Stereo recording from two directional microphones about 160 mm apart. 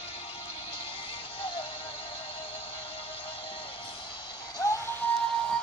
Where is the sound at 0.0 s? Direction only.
35° left (ahead or behind).